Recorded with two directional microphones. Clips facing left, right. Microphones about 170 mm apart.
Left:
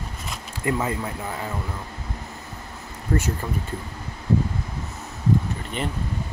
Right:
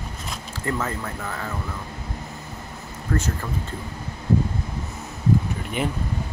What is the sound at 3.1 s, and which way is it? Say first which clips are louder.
Speech: left 1 dB; 20° left (ahead or behind).